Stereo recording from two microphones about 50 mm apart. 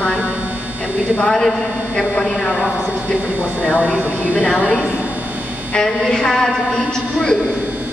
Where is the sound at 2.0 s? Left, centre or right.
Centre.